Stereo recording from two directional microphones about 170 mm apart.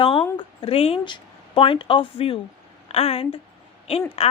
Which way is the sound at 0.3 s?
35° left (ahead or behind).